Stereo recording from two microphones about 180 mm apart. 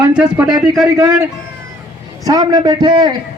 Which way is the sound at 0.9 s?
20° right (ahead or behind).